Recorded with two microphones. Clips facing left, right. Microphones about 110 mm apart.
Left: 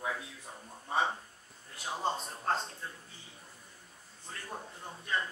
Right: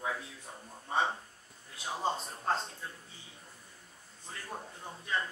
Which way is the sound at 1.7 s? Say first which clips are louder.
Even; centre (ahead or behind).